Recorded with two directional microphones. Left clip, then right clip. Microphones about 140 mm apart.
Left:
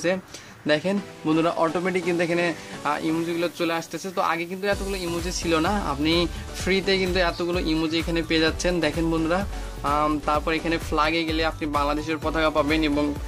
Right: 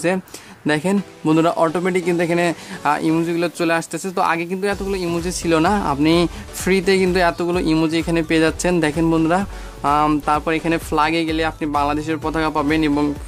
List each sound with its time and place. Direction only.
0.7 s a man's voice: 40° right (ahead or behind)